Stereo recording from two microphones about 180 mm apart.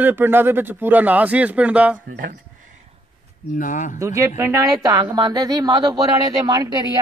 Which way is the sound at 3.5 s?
45° left (ahead or behind).